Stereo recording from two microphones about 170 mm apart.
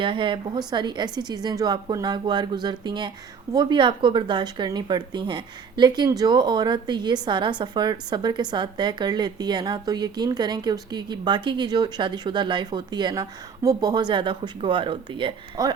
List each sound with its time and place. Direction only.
0.0 s speech: 30° right (ahead or behind)